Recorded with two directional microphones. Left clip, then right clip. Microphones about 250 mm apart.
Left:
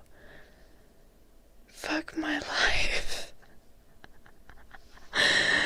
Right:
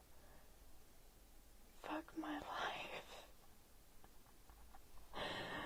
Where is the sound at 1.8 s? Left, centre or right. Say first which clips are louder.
Left 16 dB; left.